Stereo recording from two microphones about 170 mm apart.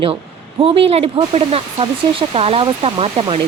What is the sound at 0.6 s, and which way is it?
Speech, 35° right (ahead or behind).